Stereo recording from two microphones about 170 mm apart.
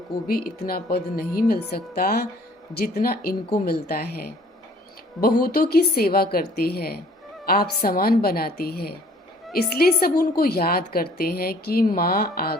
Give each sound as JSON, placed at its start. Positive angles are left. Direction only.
{"t": 0.3, "sound": "a woman's voice", "side_deg": 65}
{"t": 5.4, "sound": "a woman's voice", "side_deg": 65}